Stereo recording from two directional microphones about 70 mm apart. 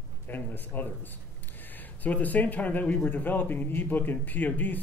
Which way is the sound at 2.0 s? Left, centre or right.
Left.